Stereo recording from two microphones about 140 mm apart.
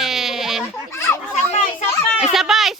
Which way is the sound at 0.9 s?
20° left (ahead or behind).